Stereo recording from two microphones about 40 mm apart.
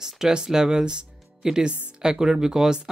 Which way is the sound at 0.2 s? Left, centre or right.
Centre.